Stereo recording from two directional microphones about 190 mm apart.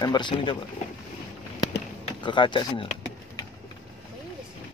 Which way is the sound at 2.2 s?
25° left (ahead or behind).